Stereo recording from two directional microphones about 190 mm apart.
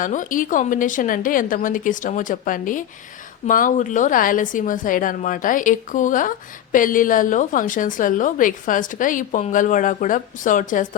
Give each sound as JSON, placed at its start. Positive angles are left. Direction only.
{"t": 0.0, "sound": "a woman's voice", "side_deg": 45}